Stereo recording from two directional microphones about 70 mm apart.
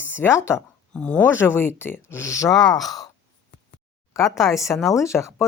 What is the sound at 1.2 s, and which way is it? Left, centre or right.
A woman's voice, left.